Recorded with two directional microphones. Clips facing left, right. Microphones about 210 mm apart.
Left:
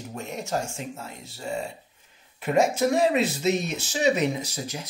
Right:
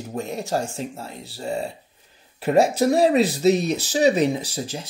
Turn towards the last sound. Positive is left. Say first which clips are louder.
# right 4 dB
turn(degrees=-30)  # may be behind; listen again after turning